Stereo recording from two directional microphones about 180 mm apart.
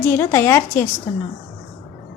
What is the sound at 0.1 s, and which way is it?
Speech, 15° left (ahead or behind).